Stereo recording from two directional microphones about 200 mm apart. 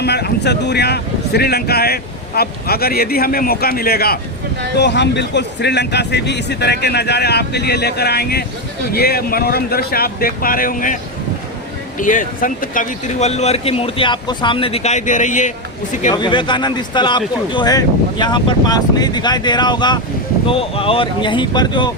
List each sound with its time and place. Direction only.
0.0 s a man's voice: 55° left (ahead or behind)
11.9 s a man's voice: 40° left (ahead or behind)
16.1 s speech: 25° left (ahead or behind)